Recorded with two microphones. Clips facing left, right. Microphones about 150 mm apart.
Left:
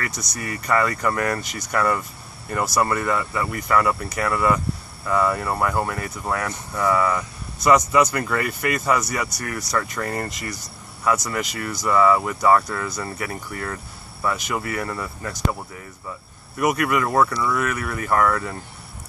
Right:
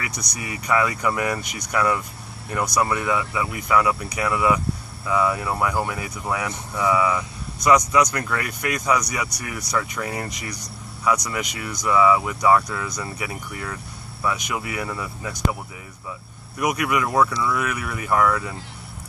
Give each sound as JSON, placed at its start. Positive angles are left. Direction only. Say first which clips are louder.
{"t": 0.0, "sound": "speech", "louder": "left 2 dB", "side_deg": 0}